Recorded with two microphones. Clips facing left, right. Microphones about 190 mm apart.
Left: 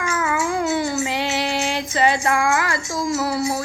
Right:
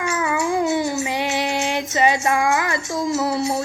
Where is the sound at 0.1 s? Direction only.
20° right (ahead or behind).